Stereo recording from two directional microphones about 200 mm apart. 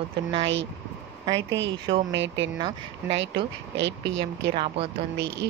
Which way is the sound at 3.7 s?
60° right (ahead or behind).